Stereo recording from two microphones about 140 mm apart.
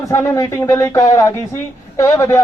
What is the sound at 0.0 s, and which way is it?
Speech, 20° left (ahead or behind).